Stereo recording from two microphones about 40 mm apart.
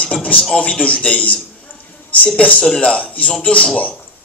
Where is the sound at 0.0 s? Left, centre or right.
Left.